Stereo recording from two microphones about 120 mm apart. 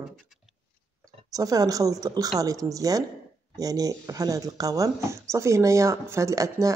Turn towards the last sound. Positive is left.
turn(degrees=-25)  # may be behind; listen again after turning